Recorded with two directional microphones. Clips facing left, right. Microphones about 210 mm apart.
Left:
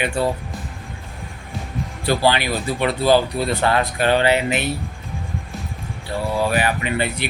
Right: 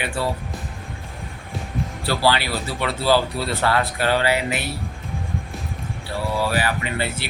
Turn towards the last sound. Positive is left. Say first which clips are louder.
# left 3 dB
turn(degrees=20)  # may be behind; listen again after turning